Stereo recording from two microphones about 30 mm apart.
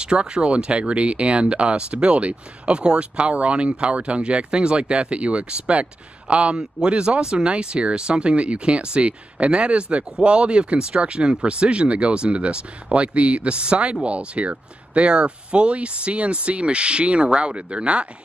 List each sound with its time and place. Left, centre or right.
0.0 s speech: right
6.5 s speech: right